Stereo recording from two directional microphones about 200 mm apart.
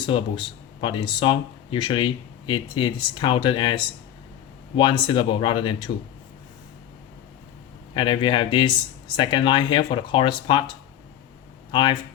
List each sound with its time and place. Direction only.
0.0 s speech: 25° left (ahead or behind)
7.9 s speech: 25° left (ahead or behind)
11.7 s speech: 25° left (ahead or behind)